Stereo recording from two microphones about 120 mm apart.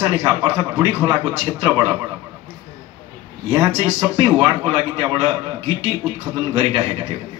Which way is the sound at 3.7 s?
40° right (ahead or behind).